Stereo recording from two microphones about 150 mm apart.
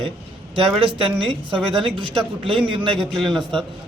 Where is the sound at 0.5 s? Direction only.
35° right (ahead or behind).